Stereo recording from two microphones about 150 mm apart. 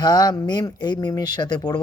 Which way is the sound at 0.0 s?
25° left (ahead or behind).